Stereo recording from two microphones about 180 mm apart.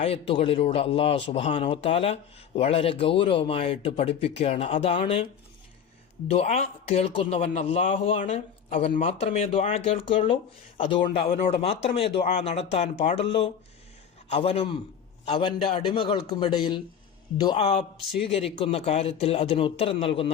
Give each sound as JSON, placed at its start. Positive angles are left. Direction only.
{"t": 0.0, "sound": "speech", "side_deg": 35}
{"t": 6.3, "sound": "a man's voice", "side_deg": 35}